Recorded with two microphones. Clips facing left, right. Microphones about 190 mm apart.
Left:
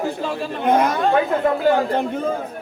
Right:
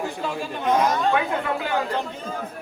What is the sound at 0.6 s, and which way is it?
Speech, 60° left (ahead or behind).